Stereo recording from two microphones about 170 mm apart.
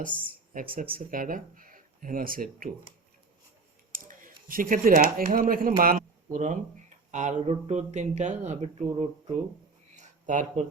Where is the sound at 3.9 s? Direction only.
55° right (ahead or behind).